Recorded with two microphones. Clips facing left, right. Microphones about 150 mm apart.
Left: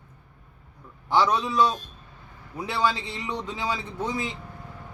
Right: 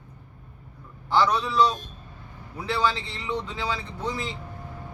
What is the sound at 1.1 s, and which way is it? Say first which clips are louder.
A man's voice: even; 20° left (ahead or behind).